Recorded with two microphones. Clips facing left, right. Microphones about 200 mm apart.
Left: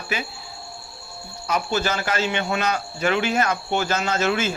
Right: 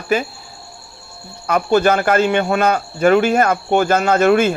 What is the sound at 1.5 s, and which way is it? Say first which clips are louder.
Speech: right 9 dB; 55° right (ahead or behind).